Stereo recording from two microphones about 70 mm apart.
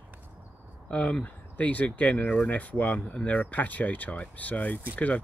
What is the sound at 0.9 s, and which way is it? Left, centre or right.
Speech, centre.